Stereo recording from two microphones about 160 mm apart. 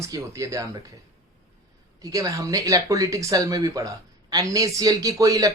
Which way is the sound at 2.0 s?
20° right (ahead or behind).